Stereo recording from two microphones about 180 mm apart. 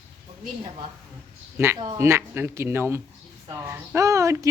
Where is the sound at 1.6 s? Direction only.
15° right (ahead or behind).